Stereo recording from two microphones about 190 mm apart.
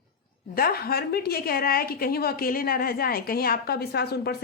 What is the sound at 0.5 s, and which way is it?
A woman's voice, 50° left (ahead or behind).